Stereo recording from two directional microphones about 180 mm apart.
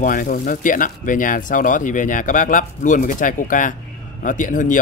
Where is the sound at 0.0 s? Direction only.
50° left (ahead or behind).